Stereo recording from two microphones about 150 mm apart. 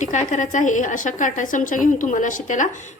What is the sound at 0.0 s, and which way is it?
Speech, 55° left (ahead or behind).